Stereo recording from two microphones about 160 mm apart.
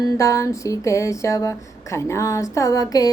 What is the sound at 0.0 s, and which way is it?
Music, 20° left (ahead or behind).